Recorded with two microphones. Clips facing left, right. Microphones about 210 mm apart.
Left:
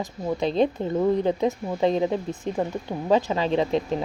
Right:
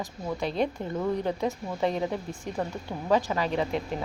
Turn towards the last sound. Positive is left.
turn(degrees=25)  # may be behind; listen again after turning